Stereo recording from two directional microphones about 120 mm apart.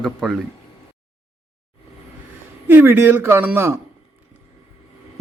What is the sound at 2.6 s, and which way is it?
Speech, 15° right (ahead or behind).